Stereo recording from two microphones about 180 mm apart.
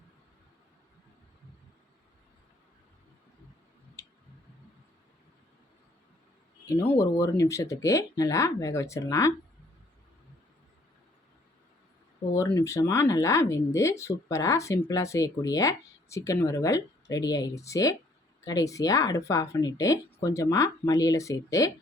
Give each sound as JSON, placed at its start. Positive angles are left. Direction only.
{"t": 4.0, "sound": "tick", "side_deg": 15}
{"t": 6.7, "sound": "speech", "side_deg": 15}
{"t": 12.3, "sound": "speech", "side_deg": 15}